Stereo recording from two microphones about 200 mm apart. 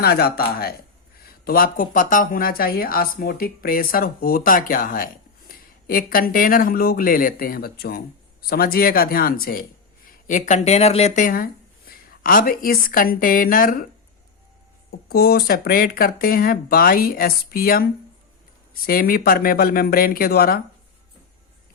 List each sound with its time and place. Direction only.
0.0 s a woman's voice: 50° left (ahead or behind)
14.8 s speech: 50° left (ahead or behind)